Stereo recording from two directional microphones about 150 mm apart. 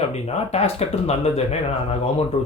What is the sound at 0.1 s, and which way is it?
Speech, 45° left (ahead or behind).